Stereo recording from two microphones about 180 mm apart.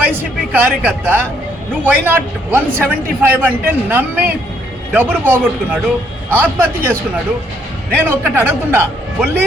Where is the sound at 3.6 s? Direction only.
10° right (ahead or behind).